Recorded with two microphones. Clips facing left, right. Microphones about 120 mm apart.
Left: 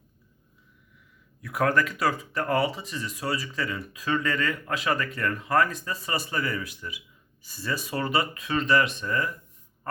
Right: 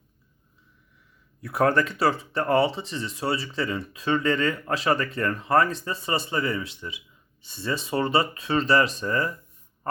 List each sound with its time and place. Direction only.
1.4 s speech: 30° right (ahead or behind)